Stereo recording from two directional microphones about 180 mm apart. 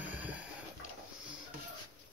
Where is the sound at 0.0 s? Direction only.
10° right (ahead or behind).